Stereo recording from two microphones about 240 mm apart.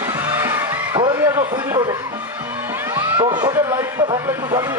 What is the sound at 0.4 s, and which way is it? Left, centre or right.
Music, centre.